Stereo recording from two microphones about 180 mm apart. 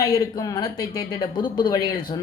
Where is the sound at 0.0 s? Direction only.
20° left (ahead or behind).